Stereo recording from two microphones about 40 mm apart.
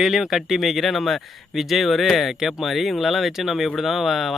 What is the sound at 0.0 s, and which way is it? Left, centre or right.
Speech, centre.